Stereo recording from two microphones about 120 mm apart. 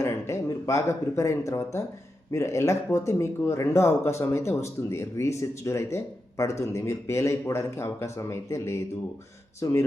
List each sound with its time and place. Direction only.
0.0 s speech: 25° left (ahead or behind)